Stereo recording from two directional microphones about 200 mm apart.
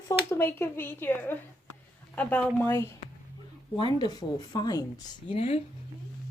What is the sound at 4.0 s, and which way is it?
Speech, 20° left (ahead or behind).